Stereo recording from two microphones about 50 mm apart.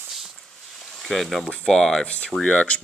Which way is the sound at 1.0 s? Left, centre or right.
Centre.